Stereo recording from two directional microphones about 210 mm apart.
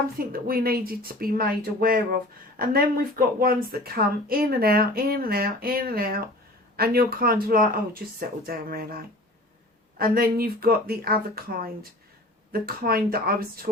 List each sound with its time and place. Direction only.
0.2 s speech: 45° right (ahead or behind)